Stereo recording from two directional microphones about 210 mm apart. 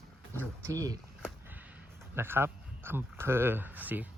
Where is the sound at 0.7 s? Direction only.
15° right (ahead or behind).